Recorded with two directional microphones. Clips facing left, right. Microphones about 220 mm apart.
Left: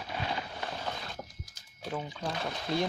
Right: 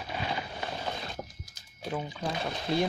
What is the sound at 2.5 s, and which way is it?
Speech, 25° right (ahead or behind).